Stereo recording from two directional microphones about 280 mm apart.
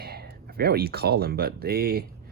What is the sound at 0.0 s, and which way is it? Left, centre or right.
Speech, right.